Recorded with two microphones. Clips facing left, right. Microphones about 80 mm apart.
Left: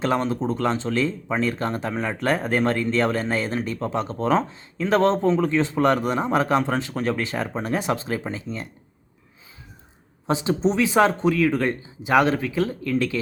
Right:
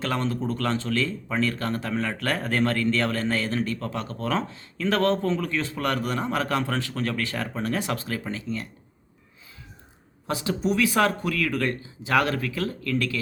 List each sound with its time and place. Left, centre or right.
0.0 s speech: left
10.2 s speech: left